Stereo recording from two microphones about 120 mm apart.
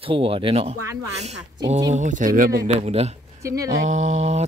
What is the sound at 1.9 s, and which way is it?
Speech, 90° right.